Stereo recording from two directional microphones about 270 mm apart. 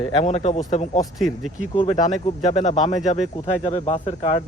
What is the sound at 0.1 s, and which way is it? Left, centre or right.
Speech, centre.